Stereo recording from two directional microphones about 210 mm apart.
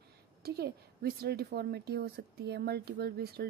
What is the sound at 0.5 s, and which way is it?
A woman's voice, 50° right (ahead or behind).